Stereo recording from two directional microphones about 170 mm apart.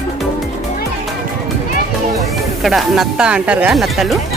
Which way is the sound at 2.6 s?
Centre (ahead or behind).